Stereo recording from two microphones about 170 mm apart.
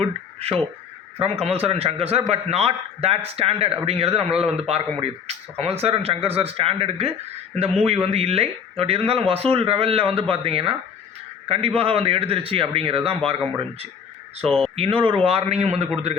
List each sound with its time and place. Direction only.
0.0 s a man's voice: 35° right (ahead or behind)
14.8 s speech: 30° right (ahead or behind)